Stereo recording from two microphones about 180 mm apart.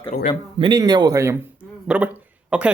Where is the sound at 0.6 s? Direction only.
25° right (ahead or behind).